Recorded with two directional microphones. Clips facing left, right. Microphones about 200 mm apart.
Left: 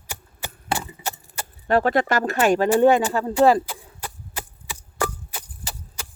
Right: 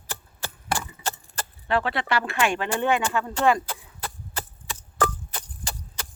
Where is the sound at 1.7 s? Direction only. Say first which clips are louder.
Left 6 dB; 45° left (ahead or behind).